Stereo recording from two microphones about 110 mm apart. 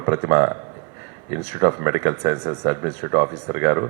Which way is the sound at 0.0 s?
25° right (ahead or behind).